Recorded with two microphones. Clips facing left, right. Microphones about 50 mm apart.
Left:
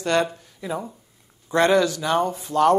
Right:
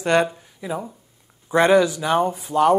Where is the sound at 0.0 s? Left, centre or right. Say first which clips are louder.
Right 3 dB; centre.